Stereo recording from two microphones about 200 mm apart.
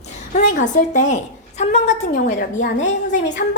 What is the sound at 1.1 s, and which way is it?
A woman's voice, 35° left (ahead or behind).